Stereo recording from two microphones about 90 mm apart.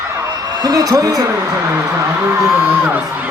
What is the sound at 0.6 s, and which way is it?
Speech, 40° right (ahead or behind).